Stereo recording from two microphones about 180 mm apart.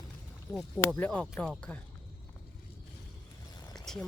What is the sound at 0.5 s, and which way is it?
Speech, 5° left (ahead or behind).